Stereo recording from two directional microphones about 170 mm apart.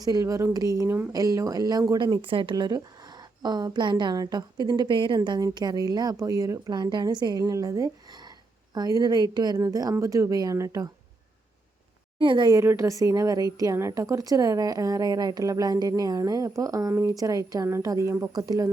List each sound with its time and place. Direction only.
0.0 s a woman's voice: 20° right (ahead or behind)
12.2 s a woman's voice: 30° right (ahead or behind)